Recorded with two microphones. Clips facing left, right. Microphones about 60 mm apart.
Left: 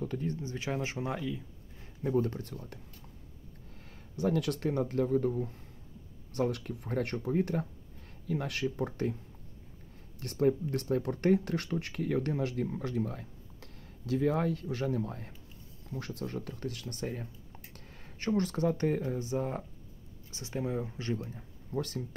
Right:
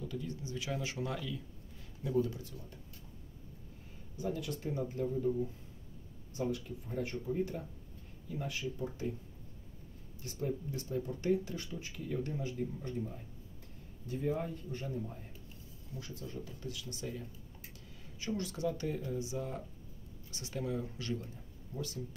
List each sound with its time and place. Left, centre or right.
0.0 s speech: left
2.0 s speech: left
4.2 s speech: left
10.2 s speech: left
20.2 s speech: left
21.4 s speech: left